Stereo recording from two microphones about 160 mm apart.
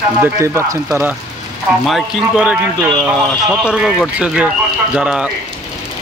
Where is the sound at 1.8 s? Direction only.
Centre (ahead or behind).